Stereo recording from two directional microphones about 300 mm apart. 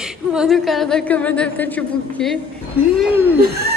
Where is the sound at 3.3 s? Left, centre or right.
Right.